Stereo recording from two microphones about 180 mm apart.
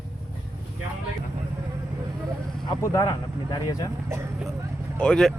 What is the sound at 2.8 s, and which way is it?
Speech, 20° left (ahead or behind).